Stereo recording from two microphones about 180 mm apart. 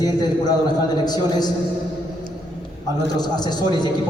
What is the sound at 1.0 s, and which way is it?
Speech, 20° left (ahead or behind).